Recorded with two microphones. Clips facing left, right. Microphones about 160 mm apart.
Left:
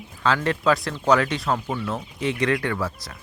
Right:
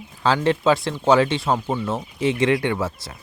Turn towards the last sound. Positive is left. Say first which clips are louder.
# right 3 dB
turn(degrees=-25)  # may be behind; listen again after turning